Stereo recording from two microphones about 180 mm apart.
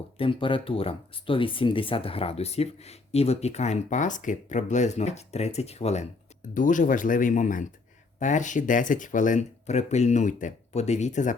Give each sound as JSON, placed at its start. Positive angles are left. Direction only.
{"t": 0.2, "sound": "speech", "side_deg": 30}